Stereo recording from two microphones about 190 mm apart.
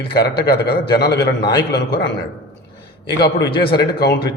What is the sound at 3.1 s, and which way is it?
A man's voice, 60° left (ahead or behind).